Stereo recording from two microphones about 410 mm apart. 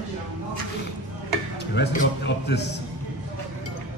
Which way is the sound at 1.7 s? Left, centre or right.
Left.